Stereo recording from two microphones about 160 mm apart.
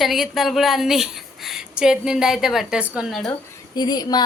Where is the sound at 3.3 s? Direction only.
25° left (ahead or behind).